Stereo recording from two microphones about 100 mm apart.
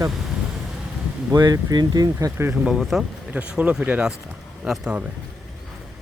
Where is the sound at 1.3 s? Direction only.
40° right (ahead or behind).